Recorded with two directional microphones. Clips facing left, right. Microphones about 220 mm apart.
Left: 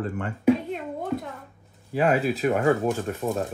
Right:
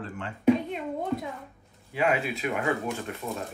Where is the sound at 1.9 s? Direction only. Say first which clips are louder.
Left 4 dB; 40° left (ahead or behind).